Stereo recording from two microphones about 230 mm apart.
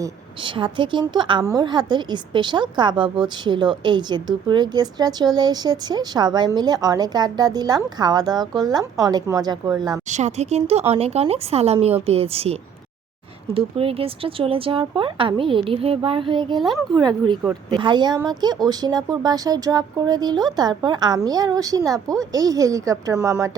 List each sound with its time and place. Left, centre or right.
0.0 s speech: right
10.1 s speech: right; by 23.5 s centre